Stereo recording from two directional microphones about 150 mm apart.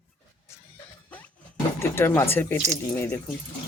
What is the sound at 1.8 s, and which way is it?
Speech, 15° left (ahead or behind).